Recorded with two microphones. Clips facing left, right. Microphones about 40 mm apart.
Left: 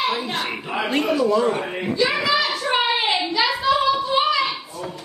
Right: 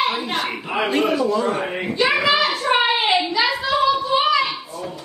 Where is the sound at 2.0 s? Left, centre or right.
Right.